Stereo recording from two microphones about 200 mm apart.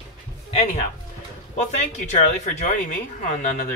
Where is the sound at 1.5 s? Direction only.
35° left (ahead or behind).